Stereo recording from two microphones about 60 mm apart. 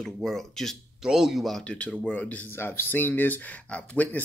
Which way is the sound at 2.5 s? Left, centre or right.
Left.